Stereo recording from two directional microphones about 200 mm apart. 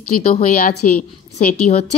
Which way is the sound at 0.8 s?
40° left (ahead or behind).